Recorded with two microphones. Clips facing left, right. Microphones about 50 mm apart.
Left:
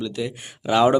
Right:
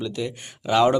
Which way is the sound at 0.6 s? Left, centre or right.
Centre.